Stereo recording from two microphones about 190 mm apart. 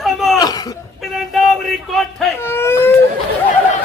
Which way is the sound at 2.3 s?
10° left (ahead or behind).